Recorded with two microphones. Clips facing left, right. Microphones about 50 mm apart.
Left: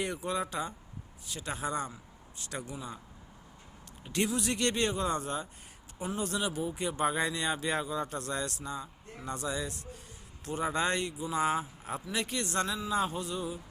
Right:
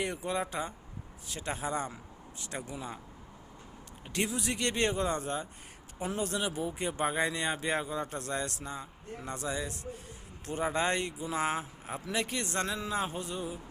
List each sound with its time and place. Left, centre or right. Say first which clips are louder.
0.0 s a man's voice: even; right
4.4 s a man's voice: even; right